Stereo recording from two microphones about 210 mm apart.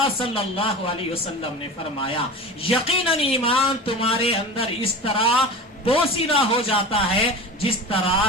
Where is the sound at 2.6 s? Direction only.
25° left (ahead or behind).